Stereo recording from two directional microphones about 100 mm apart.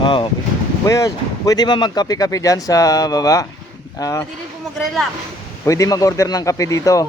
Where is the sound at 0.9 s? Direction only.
35° left (ahead or behind).